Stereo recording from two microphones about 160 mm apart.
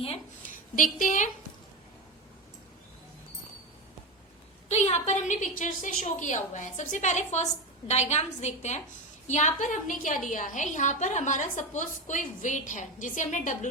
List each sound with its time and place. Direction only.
0.8 s a woman's voice: 55° left (ahead or behind)
4.7 s a woman's voice: 45° left (ahead or behind)